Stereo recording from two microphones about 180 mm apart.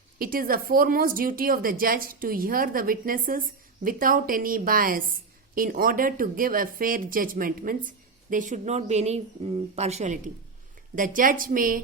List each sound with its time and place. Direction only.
0.2 s speech: 50° right (ahead or behind)